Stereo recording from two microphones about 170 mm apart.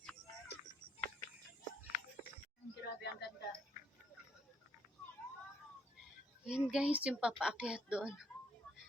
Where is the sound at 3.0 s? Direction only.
75° left (ahead or behind).